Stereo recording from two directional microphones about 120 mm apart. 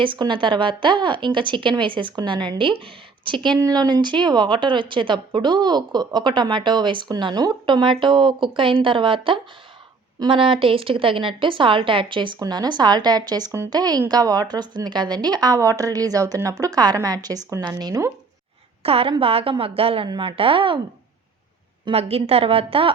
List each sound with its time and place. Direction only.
0.0 s a woman's voice: 40° right (ahead or behind)
18.8 s a woman's voice: 55° right (ahead or behind)
21.9 s a woman's voice: 55° right (ahead or behind)